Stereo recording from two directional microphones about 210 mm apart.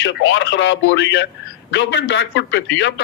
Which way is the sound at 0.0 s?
60° left (ahead or behind).